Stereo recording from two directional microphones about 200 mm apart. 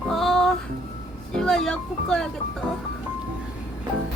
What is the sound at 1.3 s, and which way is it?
Speech, centre (ahead or behind).